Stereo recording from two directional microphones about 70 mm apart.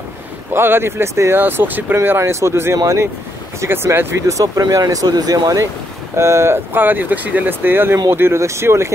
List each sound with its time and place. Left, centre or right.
0.5 s speech: right
1.4 s speech: right
3.6 s speech: right
4.3 s speech: right
6.1 s speech: right